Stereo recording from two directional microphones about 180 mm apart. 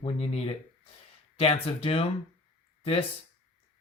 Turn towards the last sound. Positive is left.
turn(degrees=30)  # may be behind; listen again after turning